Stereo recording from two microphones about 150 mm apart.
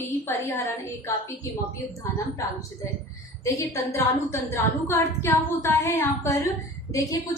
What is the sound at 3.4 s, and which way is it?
A woman's voice, 20° left (ahead or behind).